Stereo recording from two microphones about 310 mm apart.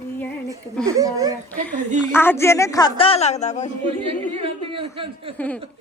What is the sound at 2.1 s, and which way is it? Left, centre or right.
Speech, centre.